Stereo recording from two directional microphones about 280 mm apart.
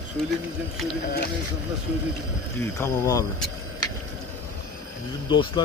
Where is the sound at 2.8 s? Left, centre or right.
Centre.